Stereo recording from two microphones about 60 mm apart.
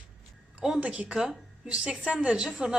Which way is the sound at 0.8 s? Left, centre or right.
Right.